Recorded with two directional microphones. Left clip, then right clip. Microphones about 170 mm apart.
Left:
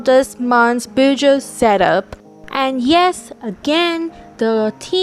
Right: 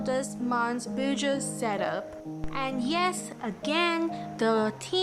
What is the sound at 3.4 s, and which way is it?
Speech, 30° left (ahead or behind).